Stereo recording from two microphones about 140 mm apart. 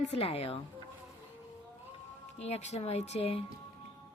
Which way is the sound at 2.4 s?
50° left (ahead or behind).